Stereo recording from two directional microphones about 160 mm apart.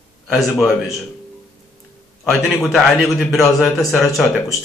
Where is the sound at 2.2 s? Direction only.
Centre (ahead or behind).